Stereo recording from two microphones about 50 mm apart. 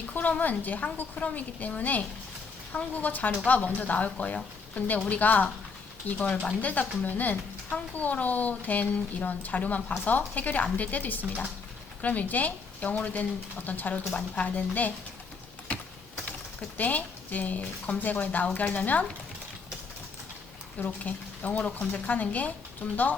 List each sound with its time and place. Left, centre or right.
0.1 s a woman's voice: left
6.6 s a woman's voice: left
15.7 s typing: left
16.7 s a woman's voice: left
20.7 s speech: left
21.6 s a woman's voice: left